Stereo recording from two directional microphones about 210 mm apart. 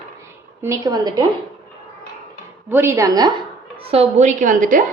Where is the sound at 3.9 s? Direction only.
30° right (ahead or behind).